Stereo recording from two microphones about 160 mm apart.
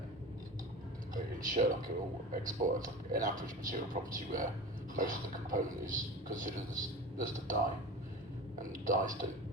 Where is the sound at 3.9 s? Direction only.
55° right (ahead or behind).